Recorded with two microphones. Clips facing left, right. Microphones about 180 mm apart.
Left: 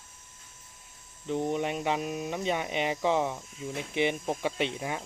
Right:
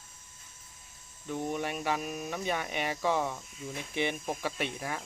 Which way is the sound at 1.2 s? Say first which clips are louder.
Left 4 dB; 20° left (ahead or behind).